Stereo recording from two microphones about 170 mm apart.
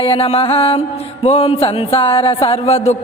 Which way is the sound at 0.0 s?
35° left (ahead or behind).